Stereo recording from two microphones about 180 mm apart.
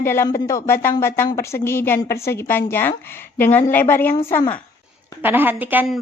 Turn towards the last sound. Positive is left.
turn(degrees=-10)  # may be behind; listen again after turning